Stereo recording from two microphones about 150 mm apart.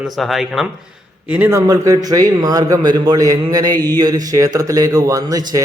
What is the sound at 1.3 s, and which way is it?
A man's voice, 15° right (ahead or behind).